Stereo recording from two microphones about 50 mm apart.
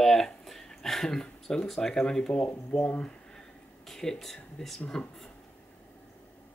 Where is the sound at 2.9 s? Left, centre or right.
Centre.